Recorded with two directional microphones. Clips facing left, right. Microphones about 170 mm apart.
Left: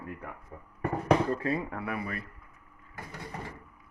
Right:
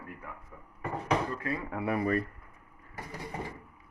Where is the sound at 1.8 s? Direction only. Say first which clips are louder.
Right 6 dB; 35° right (ahead or behind).